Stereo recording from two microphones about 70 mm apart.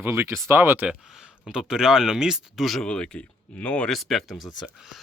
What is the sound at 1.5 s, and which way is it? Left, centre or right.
Speech, centre.